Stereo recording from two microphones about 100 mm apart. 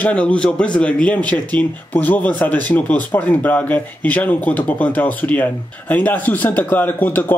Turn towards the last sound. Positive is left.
turn(degrees=20)  # may be behind; listen again after turning